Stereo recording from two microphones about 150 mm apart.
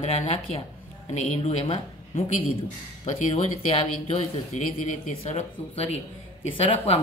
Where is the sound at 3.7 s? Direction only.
50° left (ahead or behind).